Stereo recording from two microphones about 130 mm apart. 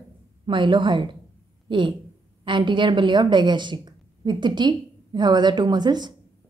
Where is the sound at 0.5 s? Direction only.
40° right (ahead or behind).